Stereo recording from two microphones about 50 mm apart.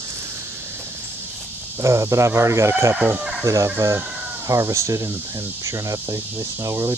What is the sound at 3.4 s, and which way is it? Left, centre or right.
Speech, right.